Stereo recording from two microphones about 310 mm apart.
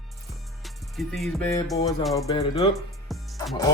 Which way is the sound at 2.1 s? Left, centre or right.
Centre.